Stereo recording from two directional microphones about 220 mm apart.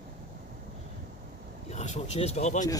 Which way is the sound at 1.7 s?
30° left (ahead or behind).